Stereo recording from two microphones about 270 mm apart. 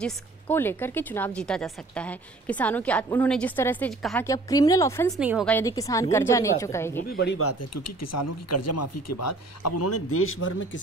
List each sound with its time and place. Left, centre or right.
0.0 s a woman's voice: centre
5.1 s a woman's voice: centre
5.5 s a woman's voice: centre
7.1 s speech: left
7.3 s speech: left